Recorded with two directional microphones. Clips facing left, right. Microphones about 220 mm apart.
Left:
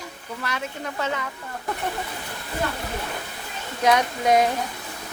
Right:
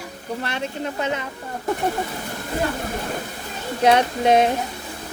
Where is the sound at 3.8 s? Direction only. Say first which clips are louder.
Right 4 dB; 30° right (ahead or behind).